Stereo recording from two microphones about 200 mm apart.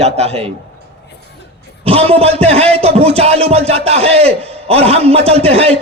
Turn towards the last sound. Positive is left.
turn(degrees=-30)  # may be behind; listen again after turning